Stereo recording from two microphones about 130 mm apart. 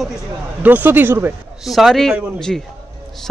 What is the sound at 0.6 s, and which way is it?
Speech, 15° right (ahead or behind).